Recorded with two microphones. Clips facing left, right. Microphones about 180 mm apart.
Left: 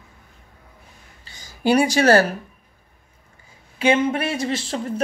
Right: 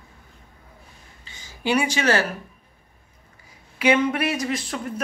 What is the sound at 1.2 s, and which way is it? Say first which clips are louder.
A woman's voice: left 5 dB; 40° left (ahead or behind).